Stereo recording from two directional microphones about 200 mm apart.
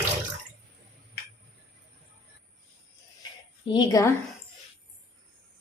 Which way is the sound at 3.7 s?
20° left (ahead or behind).